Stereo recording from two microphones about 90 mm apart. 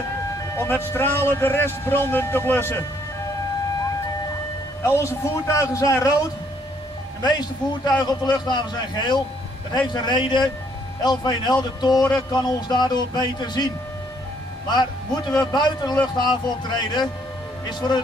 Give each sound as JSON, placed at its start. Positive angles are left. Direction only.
{"t": 0.6, "sound": "speech", "side_deg": 25}
{"t": 4.8, "sound": "a man's voice", "side_deg": 30}
{"t": 7.2, "sound": "a man's voice", "side_deg": 50}
{"t": 14.7, "sound": "a man's voice", "side_deg": 50}